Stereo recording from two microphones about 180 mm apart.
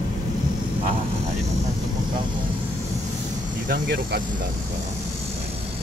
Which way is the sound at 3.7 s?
55° right (ahead or behind).